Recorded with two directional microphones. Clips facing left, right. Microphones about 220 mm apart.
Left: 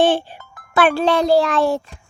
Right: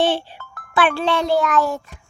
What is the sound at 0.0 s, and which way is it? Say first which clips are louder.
Music: left 3 dB; 50° left (ahead or behind).